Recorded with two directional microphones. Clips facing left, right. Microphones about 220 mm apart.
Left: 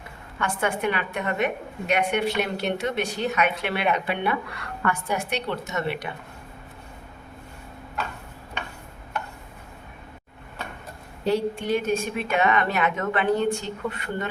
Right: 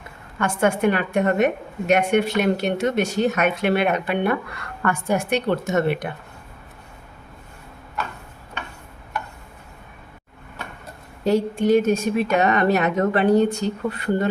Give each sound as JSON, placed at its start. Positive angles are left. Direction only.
{"t": 0.3, "sound": "a woman's voice", "side_deg": -45}
{"t": 11.3, "sound": "speech", "side_deg": -45}